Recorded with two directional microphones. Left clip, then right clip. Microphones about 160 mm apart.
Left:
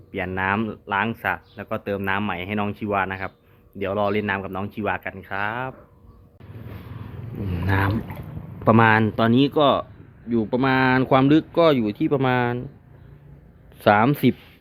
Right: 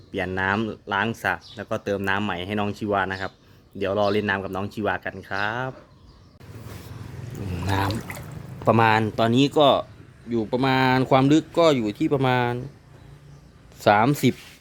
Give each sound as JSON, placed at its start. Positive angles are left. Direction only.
{"t": 0.1, "sound": "speech", "side_deg": -50}
{"t": 7.5, "sound": "speech", "side_deg": -15}
{"t": 13.7, "sound": "speech", "side_deg": -20}